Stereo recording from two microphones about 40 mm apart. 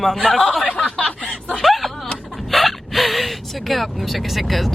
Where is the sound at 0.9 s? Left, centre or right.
Left.